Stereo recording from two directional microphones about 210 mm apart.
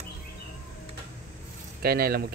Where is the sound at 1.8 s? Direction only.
45° right (ahead or behind).